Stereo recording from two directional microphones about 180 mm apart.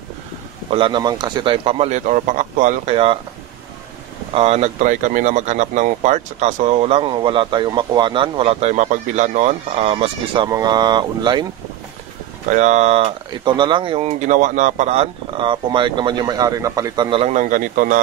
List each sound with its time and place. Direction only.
0.7 s speech: 30° right (ahead or behind)
4.3 s speech: 35° right (ahead or behind)
12.4 s speech: 40° right (ahead or behind)